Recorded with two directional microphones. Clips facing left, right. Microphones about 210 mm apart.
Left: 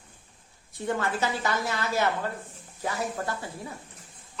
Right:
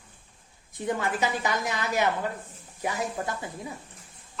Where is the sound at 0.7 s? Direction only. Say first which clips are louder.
Even; 15° right (ahead or behind).